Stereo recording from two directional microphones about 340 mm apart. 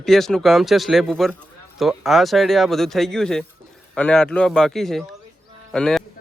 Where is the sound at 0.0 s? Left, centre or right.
Centre.